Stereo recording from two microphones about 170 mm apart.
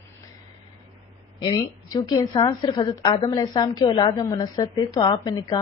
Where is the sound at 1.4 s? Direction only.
25° left (ahead or behind).